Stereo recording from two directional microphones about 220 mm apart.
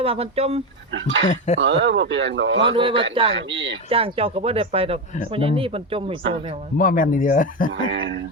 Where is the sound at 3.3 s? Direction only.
55° right (ahead or behind).